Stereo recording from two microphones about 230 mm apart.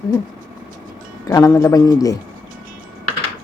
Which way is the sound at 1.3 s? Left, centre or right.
Centre.